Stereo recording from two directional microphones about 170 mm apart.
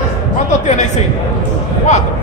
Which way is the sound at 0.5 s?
45° left (ahead or behind).